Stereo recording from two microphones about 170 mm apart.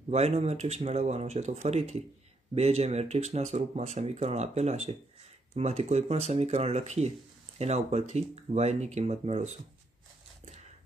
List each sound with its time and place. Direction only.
0.1 s speech: 40° right (ahead or behind)